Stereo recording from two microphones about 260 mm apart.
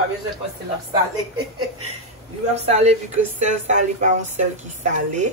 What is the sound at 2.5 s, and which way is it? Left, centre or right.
Speech, right.